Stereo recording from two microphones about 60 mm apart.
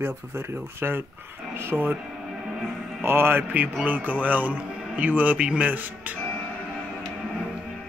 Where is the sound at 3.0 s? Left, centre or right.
Right.